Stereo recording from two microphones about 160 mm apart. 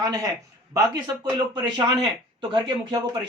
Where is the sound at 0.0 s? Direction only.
20° right (ahead or behind).